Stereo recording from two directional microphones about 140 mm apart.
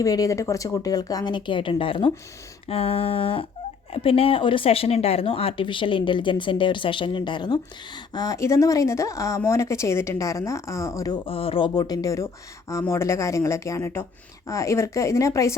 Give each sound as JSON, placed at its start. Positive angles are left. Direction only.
{"t": 0.0, "sound": "a woman's voice", "side_deg": 25}
{"t": 11.3, "sound": "speech", "side_deg": 40}